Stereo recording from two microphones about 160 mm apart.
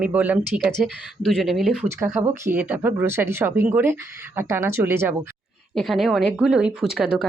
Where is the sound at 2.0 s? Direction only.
15° right (ahead or behind).